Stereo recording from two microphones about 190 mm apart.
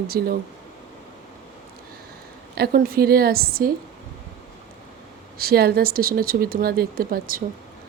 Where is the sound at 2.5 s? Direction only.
55° right (ahead or behind).